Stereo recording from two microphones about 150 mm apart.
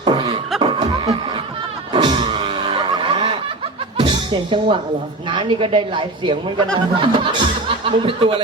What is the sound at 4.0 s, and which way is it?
Music, 35° right (ahead or behind).